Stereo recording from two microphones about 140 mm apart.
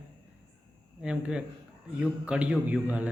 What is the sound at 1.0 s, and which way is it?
A man's voice, 5° right (ahead or behind).